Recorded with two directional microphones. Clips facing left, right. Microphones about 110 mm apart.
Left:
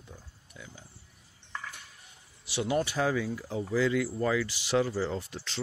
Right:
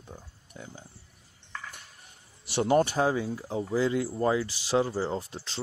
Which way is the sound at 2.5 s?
45° right (ahead or behind).